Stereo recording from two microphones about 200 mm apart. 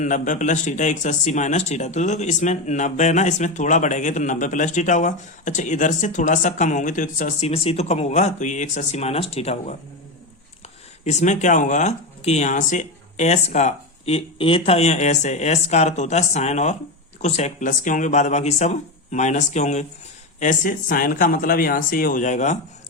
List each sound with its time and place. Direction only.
0.0 s speech: 40° left (ahead or behind)
11.0 s speech: 35° left (ahead or behind)